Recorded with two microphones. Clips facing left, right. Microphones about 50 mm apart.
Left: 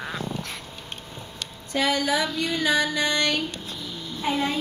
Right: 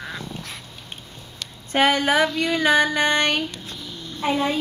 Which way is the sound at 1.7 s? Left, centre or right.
Right.